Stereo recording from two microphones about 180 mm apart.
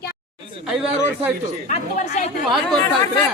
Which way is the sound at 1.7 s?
40° left (ahead or behind).